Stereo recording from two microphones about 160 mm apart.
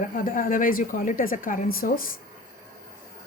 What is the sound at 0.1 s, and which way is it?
Speech, 55° left (ahead or behind).